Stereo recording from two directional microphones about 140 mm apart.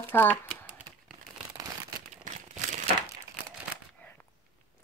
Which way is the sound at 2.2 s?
60° right (ahead or behind).